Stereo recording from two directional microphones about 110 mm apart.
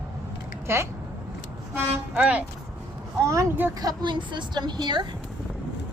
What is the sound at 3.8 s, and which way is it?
A woman's voice, 40° right (ahead or behind).